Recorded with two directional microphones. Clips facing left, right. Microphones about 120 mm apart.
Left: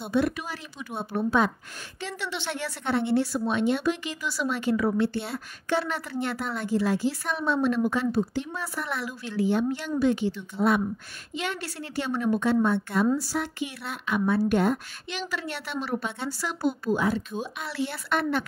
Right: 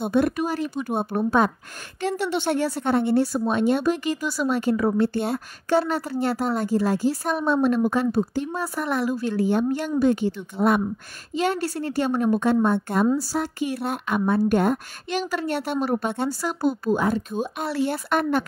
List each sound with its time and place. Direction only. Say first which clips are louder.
0.0 s a woman's voice: right 5 dB; 50° right (ahead or behind)
11.3 s a woman's voice: right 9 dB; 40° right (ahead or behind)